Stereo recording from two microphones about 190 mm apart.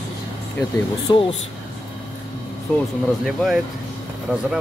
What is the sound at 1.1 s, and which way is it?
Speech, 20° left (ahead or behind).